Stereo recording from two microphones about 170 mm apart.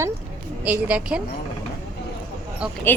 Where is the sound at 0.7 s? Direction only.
10° right (ahead or behind).